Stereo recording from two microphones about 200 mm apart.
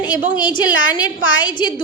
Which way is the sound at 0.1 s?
10° right (ahead or behind).